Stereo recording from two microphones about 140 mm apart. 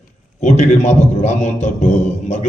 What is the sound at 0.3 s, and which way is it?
A man's voice, 55° left (ahead or behind).